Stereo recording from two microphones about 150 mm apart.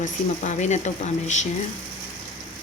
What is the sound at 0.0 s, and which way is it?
Speech, 55° left (ahead or behind).